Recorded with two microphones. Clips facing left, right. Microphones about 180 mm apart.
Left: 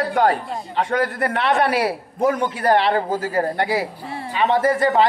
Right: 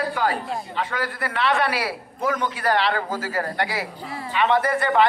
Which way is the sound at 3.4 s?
25° left (ahead or behind).